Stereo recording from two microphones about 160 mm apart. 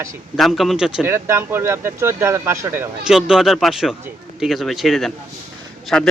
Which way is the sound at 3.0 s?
5° right (ahead or behind).